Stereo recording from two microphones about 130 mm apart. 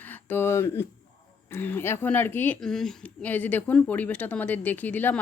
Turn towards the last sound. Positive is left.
turn(degrees=15)  # may be behind; listen again after turning